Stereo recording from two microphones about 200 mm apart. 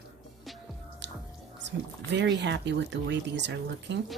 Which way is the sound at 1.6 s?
60° right (ahead or behind).